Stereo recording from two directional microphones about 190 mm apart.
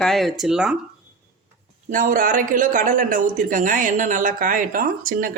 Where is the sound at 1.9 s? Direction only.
45° right (ahead or behind).